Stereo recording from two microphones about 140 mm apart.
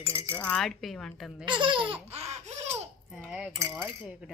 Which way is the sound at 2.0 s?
50° right (ahead or behind).